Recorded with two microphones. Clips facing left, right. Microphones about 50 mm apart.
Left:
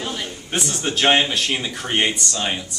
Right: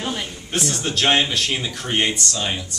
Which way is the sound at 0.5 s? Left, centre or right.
Centre.